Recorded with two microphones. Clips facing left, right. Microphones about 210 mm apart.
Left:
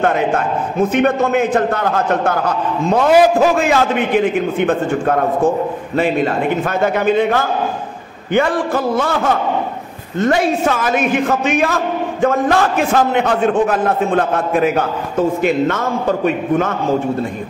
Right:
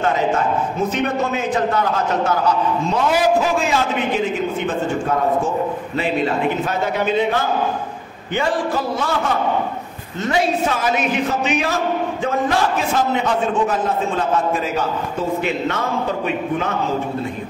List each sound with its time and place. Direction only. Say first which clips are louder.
0.0 s a man's voice: left 3 dB; 55° left (ahead or behind)